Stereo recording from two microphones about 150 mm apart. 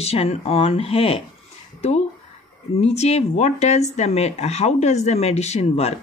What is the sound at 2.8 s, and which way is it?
Speech, 45° left (ahead or behind).